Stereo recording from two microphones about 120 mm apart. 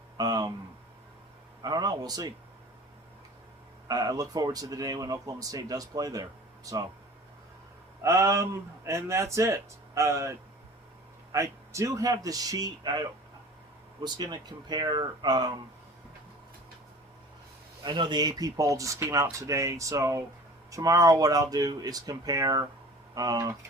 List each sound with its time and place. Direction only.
0.2 s speech: 35° right (ahead or behind)
1.6 s speech: 35° right (ahead or behind)
3.8 s speech: 30° right (ahead or behind)
8.0 s speech: 25° right (ahead or behind)
17.8 s speech: 40° right (ahead or behind)